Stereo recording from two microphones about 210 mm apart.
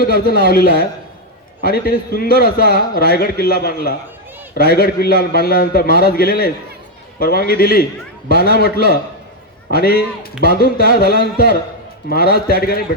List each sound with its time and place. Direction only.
0.0 s a man's voice: 45° left (ahead or behind)